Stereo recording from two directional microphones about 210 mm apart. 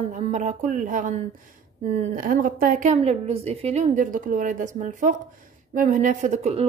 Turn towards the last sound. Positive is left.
turn(degrees=-30)  # may be behind; listen again after turning